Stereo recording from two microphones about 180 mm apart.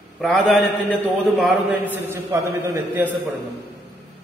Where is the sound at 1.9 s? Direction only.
15° right (ahead or behind).